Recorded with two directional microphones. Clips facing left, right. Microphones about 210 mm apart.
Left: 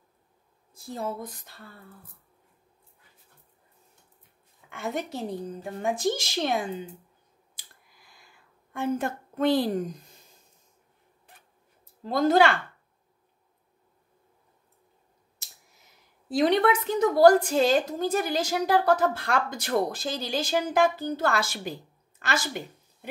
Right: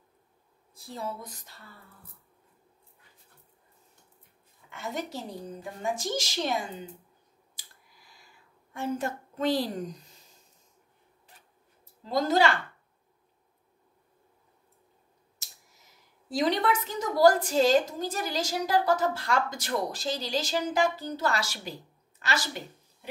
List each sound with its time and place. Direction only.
0.7 s speech: 50° left (ahead or behind)
4.7 s a woman's voice: 55° left (ahead or behind)
8.7 s a woman's voice: 55° left (ahead or behind)
12.1 s a woman's voice: 55° left (ahead or behind)
16.3 s a woman's voice: 55° left (ahead or behind)